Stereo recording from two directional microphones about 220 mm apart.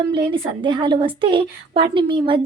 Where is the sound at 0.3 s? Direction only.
20° right (ahead or behind).